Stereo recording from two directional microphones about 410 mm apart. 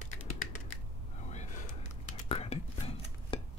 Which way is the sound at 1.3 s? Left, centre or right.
Centre.